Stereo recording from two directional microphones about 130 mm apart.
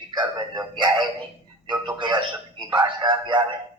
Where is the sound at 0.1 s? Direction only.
35° right (ahead or behind).